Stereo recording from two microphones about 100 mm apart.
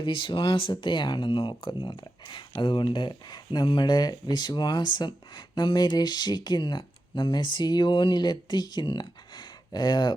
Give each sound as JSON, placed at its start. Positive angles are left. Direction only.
{"t": 0.0, "sound": "speech", "side_deg": 55}